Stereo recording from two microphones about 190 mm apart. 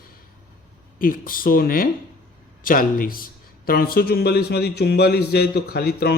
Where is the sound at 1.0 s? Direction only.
50° left (ahead or behind).